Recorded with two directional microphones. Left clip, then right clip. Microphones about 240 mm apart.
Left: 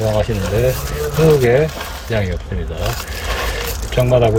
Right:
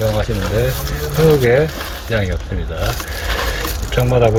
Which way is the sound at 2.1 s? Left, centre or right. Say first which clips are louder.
Right 1 dB; centre.